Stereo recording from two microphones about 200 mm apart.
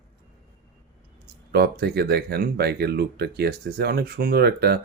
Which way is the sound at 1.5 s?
50° right (ahead or behind).